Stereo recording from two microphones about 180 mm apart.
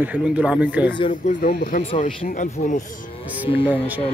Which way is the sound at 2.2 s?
55° left (ahead or behind).